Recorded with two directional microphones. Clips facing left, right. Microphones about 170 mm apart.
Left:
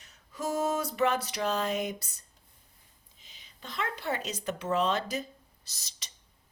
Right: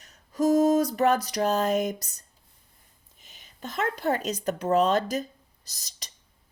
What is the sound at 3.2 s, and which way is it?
Speech, 50° right (ahead or behind).